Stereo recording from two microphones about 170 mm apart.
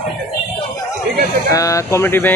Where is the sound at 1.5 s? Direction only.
20° left (ahead or behind).